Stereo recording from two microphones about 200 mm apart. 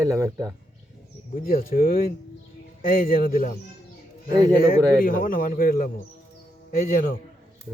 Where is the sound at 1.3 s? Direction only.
45° left (ahead or behind).